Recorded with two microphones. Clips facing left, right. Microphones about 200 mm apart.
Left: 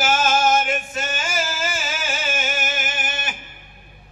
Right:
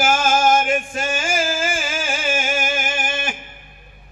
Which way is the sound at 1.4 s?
50° right (ahead or behind).